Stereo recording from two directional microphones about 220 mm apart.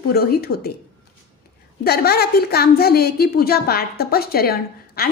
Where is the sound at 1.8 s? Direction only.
45° left (ahead or behind).